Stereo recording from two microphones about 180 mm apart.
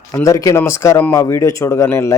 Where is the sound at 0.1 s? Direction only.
15° left (ahead or behind).